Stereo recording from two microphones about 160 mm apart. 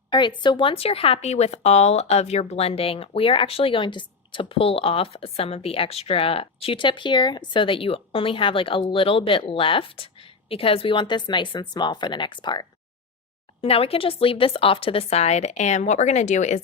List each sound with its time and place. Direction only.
0.1 s a woman's voice: 30° left (ahead or behind); by 16.6 s 45° left (ahead or behind)